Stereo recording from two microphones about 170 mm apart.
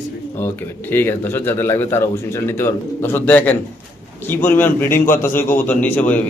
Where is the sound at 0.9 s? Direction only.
15° left (ahead or behind).